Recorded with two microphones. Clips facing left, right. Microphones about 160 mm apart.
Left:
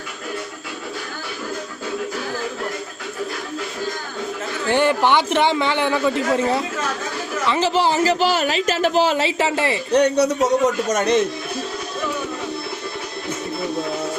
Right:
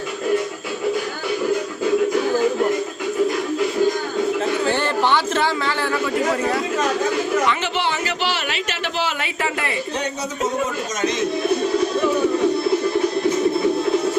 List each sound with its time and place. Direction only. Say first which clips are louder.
4.7 s speech: left 8 dB; 15° left (ahead or behind)
7.4 s speech: left 3 dB; 35° left (ahead or behind)
9.9 s speech: left 10 dB; 70° left (ahead or behind)